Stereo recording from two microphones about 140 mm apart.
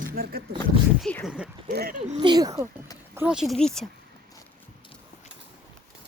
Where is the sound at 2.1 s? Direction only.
30° right (ahead or behind).